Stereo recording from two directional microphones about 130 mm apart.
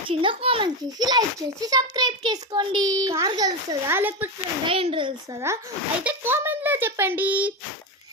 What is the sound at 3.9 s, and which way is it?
Speech, 15° right (ahead or behind).